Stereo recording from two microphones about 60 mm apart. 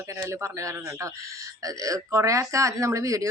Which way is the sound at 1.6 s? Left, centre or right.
Right.